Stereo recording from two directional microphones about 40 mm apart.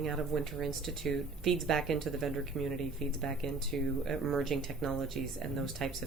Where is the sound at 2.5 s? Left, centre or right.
Left.